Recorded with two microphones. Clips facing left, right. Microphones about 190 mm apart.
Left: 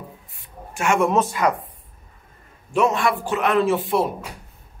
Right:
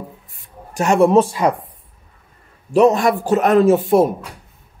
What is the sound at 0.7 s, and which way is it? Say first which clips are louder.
Speech: right 6 dB; 35° right (ahead or behind).